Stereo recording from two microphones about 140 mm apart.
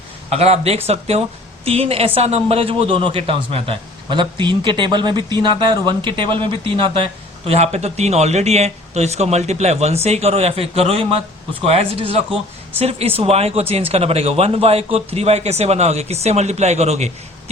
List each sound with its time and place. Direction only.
0.3 s a man's voice: 50° right (ahead or behind)